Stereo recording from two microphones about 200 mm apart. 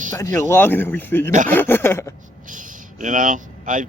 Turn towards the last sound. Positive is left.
turn(degrees=-40)  # may be behind; listen again after turning